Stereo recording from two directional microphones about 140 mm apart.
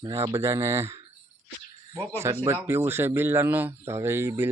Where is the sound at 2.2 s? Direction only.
20° right (ahead or behind).